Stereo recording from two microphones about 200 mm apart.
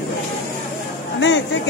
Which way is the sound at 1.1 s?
65° left (ahead or behind).